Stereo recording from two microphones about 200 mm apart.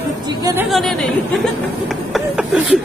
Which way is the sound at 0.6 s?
Centre (ahead or behind).